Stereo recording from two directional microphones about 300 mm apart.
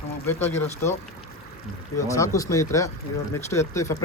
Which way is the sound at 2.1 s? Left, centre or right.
Centre.